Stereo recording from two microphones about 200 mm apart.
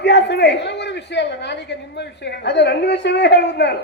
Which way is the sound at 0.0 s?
60° left (ahead or behind).